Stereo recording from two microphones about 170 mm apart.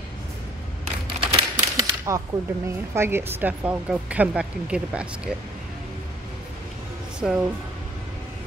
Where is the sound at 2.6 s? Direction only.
15° right (ahead or behind).